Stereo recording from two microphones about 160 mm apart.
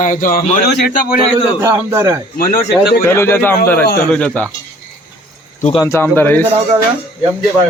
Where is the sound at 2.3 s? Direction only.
60° left (ahead or behind).